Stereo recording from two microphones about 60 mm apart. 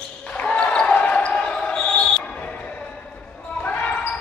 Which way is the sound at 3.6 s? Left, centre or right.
Left.